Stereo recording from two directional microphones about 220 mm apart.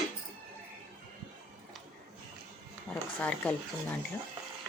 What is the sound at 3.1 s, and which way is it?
Speech, 5° left (ahead or behind).